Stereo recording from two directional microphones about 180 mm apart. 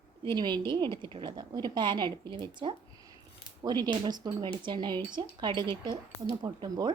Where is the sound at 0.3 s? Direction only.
25° right (ahead or behind).